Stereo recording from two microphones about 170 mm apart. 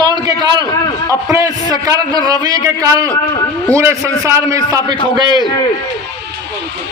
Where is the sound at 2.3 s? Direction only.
20° right (ahead or behind).